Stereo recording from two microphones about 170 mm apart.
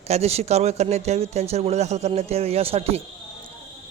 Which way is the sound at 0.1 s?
40° right (ahead or behind).